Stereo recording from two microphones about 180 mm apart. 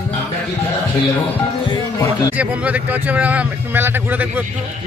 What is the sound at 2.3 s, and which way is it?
Speech, 10° right (ahead or behind).